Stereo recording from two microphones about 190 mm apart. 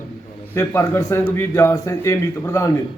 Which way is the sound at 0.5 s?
15° left (ahead or behind).